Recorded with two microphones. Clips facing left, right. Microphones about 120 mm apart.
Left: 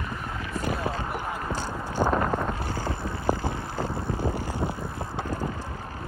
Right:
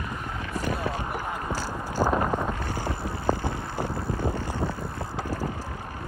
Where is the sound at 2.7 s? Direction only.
20° right (ahead or behind).